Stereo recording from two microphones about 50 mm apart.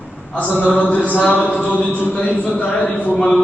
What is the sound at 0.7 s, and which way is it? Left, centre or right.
Speech, left.